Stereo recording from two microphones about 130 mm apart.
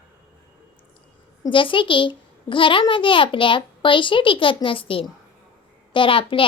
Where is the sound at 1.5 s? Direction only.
40° left (ahead or behind).